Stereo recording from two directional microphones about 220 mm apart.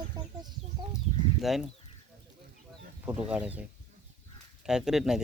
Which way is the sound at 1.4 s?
Centre (ahead or behind).